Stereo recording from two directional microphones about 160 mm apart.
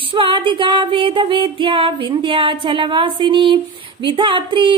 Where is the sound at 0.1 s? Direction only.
30° right (ahead or behind).